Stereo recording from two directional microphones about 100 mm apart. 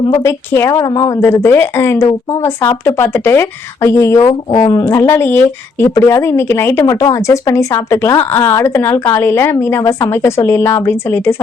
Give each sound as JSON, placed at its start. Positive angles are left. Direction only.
{"t": 0.3, "sound": "speech", "side_deg": 25}
{"t": 6.8, "sound": "speech", "side_deg": 35}